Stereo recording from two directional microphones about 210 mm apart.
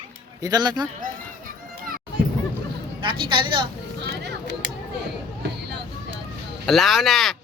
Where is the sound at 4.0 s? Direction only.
55° right (ahead or behind).